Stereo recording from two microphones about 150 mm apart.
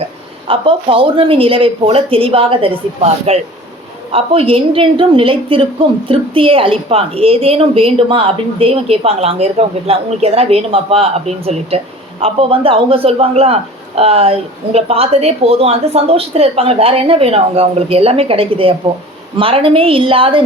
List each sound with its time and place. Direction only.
0.0 s a man's voice: 35° right (ahead or behind)